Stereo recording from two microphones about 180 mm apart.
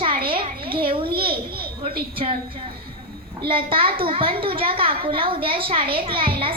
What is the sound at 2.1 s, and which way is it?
A woman's voice, 30° right (ahead or behind).